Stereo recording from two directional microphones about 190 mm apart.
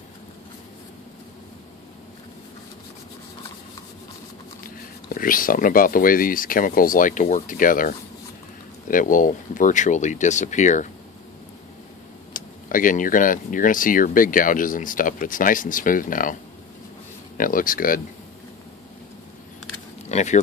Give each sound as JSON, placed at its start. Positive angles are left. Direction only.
{"t": 4.6, "sound": "speech", "side_deg": 50}
{"t": 12.4, "sound": "speech", "side_deg": 45}
{"t": 17.4, "sound": "speech", "side_deg": 45}
{"t": 20.1, "sound": "a sound", "side_deg": 35}